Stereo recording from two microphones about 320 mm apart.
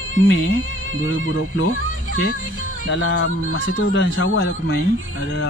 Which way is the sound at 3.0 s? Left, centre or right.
Left.